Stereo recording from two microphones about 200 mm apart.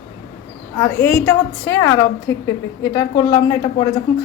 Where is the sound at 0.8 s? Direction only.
10° left (ahead or behind).